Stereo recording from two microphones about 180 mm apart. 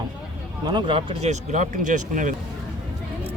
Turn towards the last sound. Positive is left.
turn(degrees=-45)  # may be behind; listen again after turning